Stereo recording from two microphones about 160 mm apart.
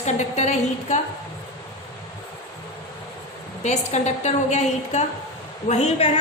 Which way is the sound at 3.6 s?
45° left (ahead or behind).